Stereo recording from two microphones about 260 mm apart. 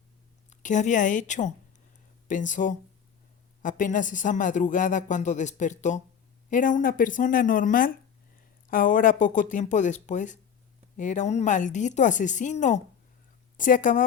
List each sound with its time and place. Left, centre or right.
0.5 s speech: left